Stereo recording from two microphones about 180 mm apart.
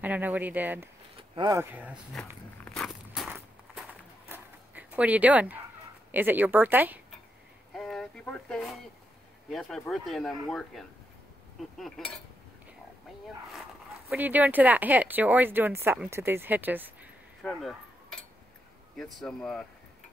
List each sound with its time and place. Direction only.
0.0 s speech: 10° right (ahead or behind)
1.3 s speech: 25° right (ahead or behind)
1.6 s speech: 10° right (ahead or behind)
2.1 s speech: 5° left (ahead or behind)
3.2 s walk: 5° right (ahead or behind)
4.3 s a sound: 10° right (ahead or behind)
6.1 s speech: 10° right (ahead or behind)
7.7 s a sound: centre (ahead or behind)
9.5 s speech: centre (ahead or behind)
14.0 s speech: 10° right (ahead or behind)
17.4 s a sound: centre (ahead or behind)
19.2 s speech: 5° left (ahead or behind)